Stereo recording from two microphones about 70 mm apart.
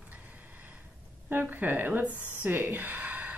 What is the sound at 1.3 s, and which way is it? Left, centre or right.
Speech, right.